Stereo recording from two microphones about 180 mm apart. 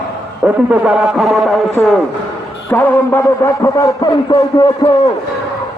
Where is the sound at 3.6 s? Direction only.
20° left (ahead or behind).